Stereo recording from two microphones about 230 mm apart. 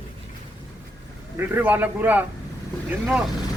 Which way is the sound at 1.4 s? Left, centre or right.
Centre.